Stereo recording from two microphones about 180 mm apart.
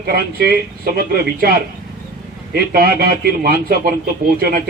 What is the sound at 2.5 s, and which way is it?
Speech, 60° right (ahead or behind).